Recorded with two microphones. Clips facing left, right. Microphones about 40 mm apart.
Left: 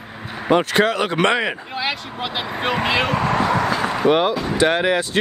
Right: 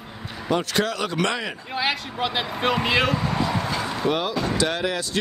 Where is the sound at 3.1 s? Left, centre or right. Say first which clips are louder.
Left 6 dB; left.